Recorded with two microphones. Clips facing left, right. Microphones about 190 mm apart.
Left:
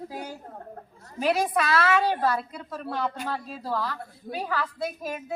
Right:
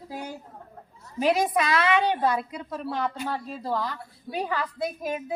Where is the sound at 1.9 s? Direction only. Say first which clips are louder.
Right 1 dB; 5° left (ahead or behind).